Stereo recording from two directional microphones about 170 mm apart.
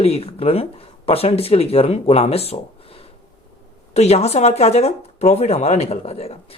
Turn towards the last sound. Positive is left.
turn(degrees=35)  # may be behind; listen again after turning